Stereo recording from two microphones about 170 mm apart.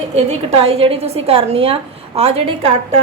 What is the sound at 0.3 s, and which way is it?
A woman's voice, 35° right (ahead or behind).